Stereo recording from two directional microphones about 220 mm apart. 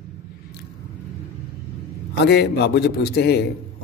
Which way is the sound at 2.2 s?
50° left (ahead or behind).